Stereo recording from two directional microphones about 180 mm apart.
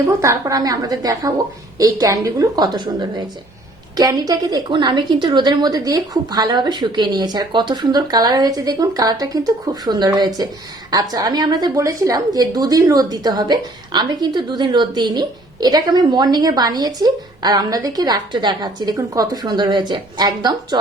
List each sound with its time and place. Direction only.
0.2 s a woman's voice: 15° right (ahead or behind)